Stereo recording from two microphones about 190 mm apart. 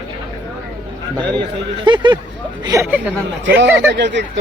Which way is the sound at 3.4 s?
70° right (ahead or behind).